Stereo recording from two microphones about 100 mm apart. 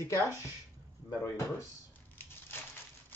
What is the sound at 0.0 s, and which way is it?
Speech, 30° left (ahead or behind).